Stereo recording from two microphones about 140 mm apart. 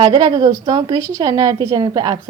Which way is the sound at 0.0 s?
30° right (ahead or behind).